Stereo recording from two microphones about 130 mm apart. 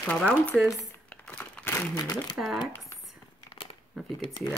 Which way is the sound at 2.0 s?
30° left (ahead or behind).